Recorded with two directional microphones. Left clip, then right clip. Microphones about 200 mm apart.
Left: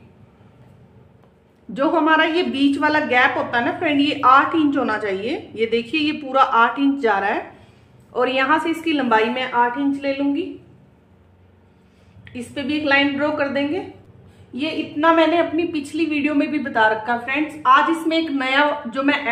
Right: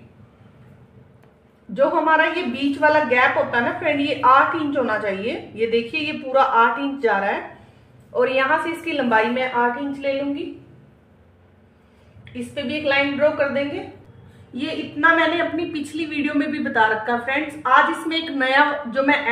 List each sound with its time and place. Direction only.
1.7 s a woman's voice: 40° left (ahead or behind)
12.3 s a woman's voice: 40° left (ahead or behind)
14.5 s a woman's voice: 25° left (ahead or behind)